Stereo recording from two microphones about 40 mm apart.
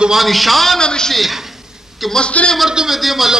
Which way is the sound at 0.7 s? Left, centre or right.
Centre.